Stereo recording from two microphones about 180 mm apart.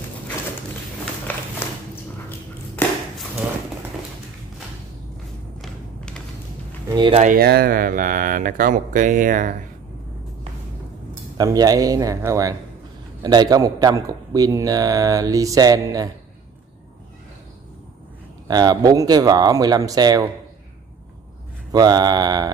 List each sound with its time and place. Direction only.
1.3 s a sound: 10° left (ahead or behind)
5.6 s a sound: 5° left (ahead or behind)
6.9 s speech: 25° right (ahead or behind)
7.2 s speech: 50° right (ahead or behind)
11.3 s a man's voice: 20° right (ahead or behind)
18.5 s a man's voice: 20° right (ahead or behind)
21.7 s a man's voice: 20° right (ahead or behind)